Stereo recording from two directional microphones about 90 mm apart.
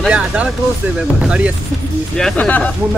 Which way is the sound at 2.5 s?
15° left (ahead or behind).